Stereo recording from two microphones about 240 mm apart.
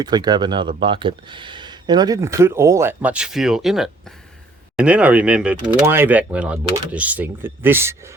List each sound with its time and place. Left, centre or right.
0.0 s speech: centre